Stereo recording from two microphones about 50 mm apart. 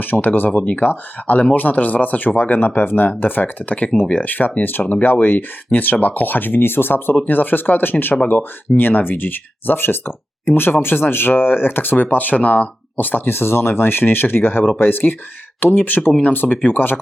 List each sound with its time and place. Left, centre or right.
0.0 s speech: left
13.2 s speech: left